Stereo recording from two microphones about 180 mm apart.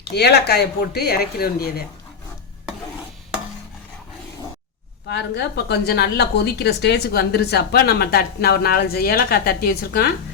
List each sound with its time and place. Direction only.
0.1 s a woman's voice: 65° left (ahead or behind)
5.0 s a woman's voice: 70° left (ahead or behind)